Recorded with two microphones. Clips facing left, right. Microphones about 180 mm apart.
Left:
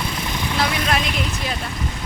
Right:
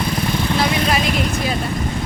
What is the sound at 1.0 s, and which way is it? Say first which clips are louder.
Vehicle: right 5 dB; 45° right (ahead or behind).